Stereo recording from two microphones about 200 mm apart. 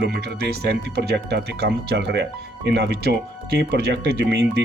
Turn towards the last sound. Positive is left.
turn(degrees=-55)  # may be behind; listen again after turning